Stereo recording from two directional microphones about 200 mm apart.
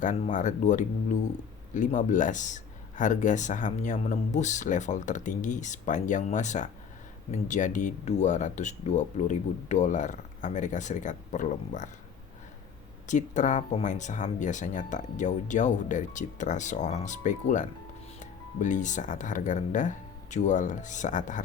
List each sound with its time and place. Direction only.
0.0 s speech: 40° left (ahead or behind)
13.1 s speech: 40° left (ahead or behind)